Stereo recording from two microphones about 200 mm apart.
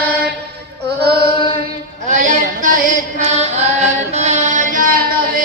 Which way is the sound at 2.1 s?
40° right (ahead or behind).